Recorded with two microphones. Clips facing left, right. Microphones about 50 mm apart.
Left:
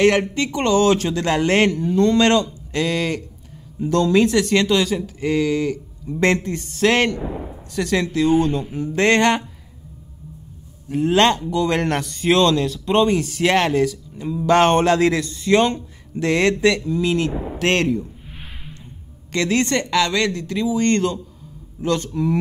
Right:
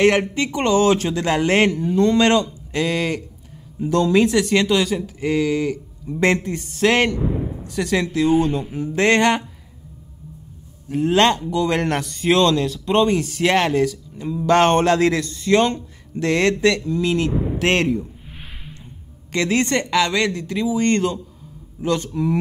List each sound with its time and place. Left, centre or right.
0.0 s speech: centre
10.9 s a man's voice: centre
17.6 s speech: centre
18.3 s a sound: centre
19.3 s speech: centre